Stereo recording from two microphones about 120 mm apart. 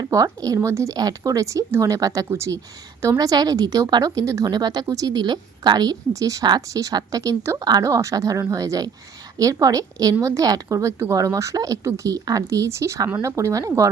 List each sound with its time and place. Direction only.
0.0 s a woman's voice: 30° right (ahead or behind)